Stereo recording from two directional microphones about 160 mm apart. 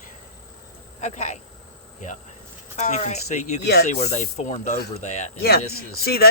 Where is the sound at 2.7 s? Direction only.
45° left (ahead or behind).